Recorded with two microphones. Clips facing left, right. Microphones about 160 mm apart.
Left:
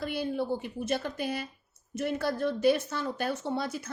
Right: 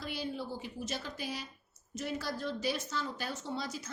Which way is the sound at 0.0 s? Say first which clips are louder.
Left 7 dB; 55° left (ahead or behind).